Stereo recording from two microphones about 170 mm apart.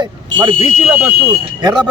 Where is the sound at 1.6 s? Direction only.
25° right (ahead or behind).